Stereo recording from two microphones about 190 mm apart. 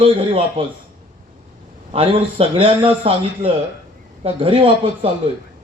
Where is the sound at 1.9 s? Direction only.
30° right (ahead or behind).